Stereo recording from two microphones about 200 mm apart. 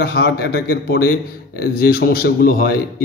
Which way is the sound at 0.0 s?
55° left (ahead or behind).